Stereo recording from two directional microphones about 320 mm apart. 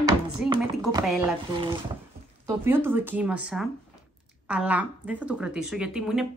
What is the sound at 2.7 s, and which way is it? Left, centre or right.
Speech, centre.